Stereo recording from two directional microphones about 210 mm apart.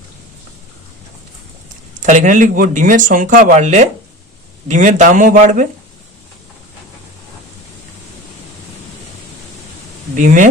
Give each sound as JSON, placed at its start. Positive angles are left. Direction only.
{"t": 2.0, "sound": "speech", "side_deg": -35}
{"t": 10.2, "sound": "speech", "side_deg": -40}